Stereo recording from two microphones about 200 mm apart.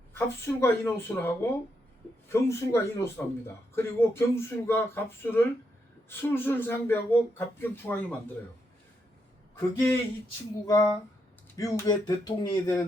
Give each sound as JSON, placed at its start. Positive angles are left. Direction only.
{"t": 0.1, "sound": "speech", "side_deg": 10}
{"t": 9.6, "sound": "speech", "side_deg": 15}